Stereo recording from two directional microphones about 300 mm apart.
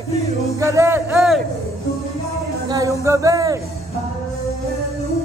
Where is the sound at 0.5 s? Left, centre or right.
Centre.